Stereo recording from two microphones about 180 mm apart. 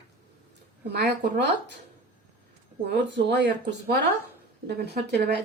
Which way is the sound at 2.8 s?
70° right (ahead or behind).